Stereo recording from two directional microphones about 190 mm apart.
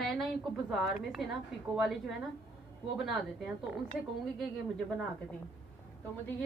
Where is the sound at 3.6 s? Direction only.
Centre (ahead or behind).